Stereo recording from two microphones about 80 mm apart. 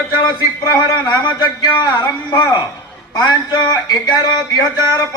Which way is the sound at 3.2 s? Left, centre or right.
Left.